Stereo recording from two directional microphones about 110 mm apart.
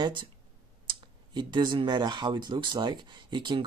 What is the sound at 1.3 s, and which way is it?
Speech, 45° right (ahead or behind).